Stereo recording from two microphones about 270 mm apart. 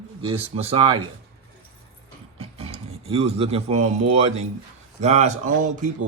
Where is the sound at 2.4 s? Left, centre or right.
Right.